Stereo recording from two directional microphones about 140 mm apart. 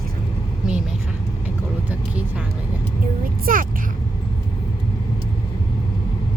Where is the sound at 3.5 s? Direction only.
80° right.